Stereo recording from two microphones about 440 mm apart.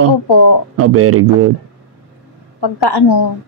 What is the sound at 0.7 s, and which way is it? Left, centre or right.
Speech, right.